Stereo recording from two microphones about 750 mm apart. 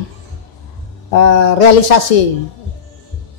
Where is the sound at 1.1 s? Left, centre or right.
Left.